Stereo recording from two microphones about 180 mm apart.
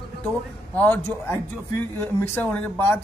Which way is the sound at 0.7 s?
10° left (ahead or behind).